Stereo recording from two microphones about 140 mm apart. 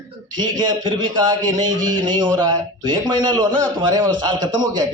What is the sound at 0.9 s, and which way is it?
Speech, 30° right (ahead or behind).